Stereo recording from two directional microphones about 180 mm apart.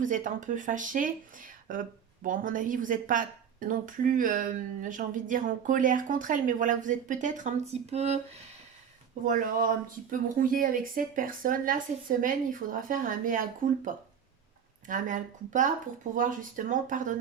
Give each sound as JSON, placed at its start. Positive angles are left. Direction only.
{"t": 0.0, "sound": "a woman's voice", "side_deg": -45}
{"t": 9.2, "sound": "a woman's voice", "side_deg": -45}